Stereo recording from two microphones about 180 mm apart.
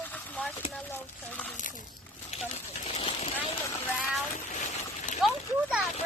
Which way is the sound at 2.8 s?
35° left (ahead or behind).